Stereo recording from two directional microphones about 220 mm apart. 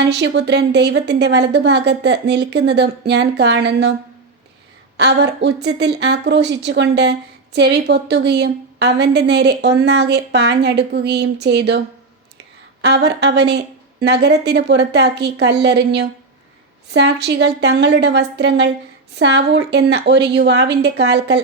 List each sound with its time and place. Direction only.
0.0 s speech: 50° right (ahead or behind)
4.9 s speech: 50° right (ahead or behind)
12.8 s speech: 50° right (ahead or behind)